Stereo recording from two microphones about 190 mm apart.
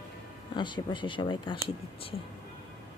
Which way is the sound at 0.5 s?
25° left (ahead or behind).